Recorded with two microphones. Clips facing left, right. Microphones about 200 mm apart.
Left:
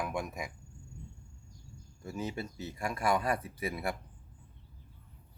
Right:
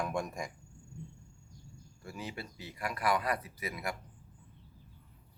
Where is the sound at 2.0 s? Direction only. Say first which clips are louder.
Left 5 dB; 20° left (ahead or behind).